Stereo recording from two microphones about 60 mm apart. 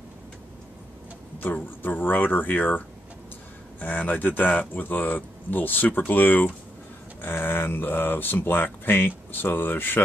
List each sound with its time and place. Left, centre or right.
1.4 s speech: left
3.8 s speech: left